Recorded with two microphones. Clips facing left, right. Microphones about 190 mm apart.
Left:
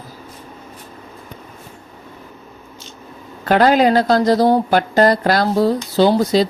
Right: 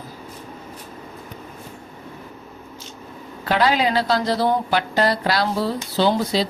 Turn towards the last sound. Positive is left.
turn(degrees=45)  # may be behind; listen again after turning